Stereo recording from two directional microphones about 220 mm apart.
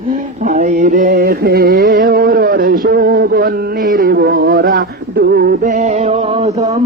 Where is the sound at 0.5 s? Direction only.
35° right (ahead or behind).